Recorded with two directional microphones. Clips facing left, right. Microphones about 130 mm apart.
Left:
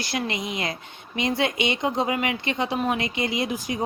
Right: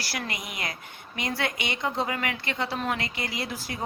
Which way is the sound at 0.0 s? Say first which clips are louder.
Left 6 dB; 20° left (ahead or behind).